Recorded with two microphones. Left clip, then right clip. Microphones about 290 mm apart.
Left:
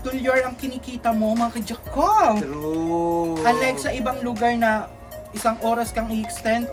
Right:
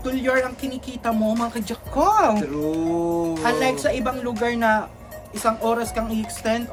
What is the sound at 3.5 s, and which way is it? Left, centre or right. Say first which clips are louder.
Speech: even; centre.